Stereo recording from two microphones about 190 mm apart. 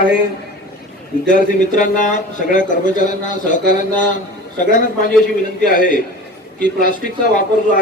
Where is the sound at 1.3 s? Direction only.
45° left (ahead or behind).